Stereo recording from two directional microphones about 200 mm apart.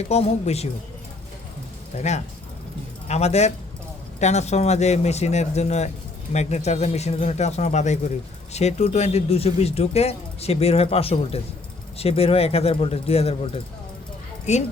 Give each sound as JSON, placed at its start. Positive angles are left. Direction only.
{"t": 0.1, "sound": "speech", "side_deg": 30}
{"t": 2.0, "sound": "speech", "side_deg": 35}